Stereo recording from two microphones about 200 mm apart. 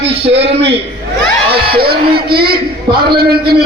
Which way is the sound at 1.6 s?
50° right (ahead or behind).